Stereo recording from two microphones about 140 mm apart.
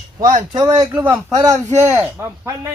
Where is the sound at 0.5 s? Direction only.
25° right (ahead or behind).